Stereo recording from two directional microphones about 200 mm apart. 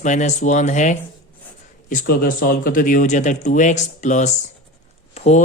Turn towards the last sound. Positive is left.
turn(degrees=35)  # may be behind; listen again after turning